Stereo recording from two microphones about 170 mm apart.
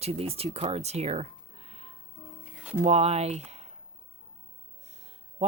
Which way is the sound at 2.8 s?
40° right (ahead or behind).